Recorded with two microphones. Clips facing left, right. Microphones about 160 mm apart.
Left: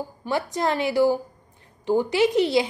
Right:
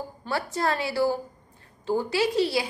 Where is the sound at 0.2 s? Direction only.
20° left (ahead or behind).